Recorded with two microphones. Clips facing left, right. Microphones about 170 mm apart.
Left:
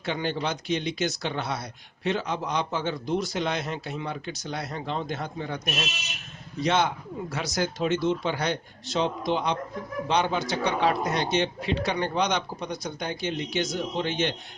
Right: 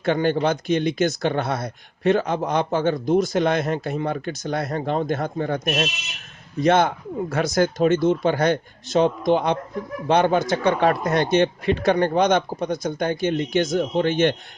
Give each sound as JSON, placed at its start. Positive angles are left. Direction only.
{"t": 0.0, "sound": "speech", "side_deg": -50}